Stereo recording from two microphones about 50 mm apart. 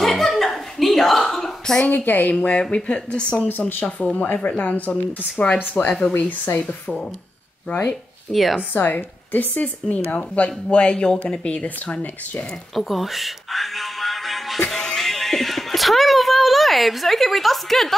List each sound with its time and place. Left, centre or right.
0.0 s a sound: centre
1.9 s a woman's voice: left
2.3 s speech: left
3.4 s a woman's voice: left
3.8 s speech: left
5.4 s speech: left
6.1 s speech: left
8.3 s speech: centre
8.7 s a woman's voice: left; by 11.6 s centre
11.6 s speech: left
12.7 s music: centre
14.7 s a sound: centre